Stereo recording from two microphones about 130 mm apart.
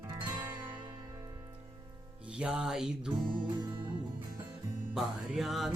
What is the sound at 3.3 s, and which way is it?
Music, 35° right (ahead or behind).